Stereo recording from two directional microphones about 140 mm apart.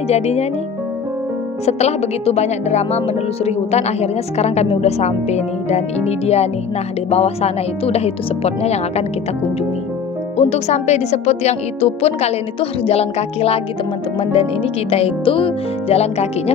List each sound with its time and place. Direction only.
0.1 s speech: 50° left (ahead or behind)
1.7 s speech: 50° left (ahead or behind)
10.3 s speech: 50° left (ahead or behind)
14.9 s speech: 45° left (ahead or behind)